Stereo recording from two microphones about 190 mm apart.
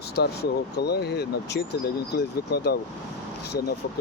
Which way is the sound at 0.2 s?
60° left (ahead or behind).